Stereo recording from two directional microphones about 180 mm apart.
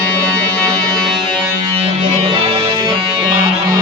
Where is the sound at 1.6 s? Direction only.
30° right (ahead or behind).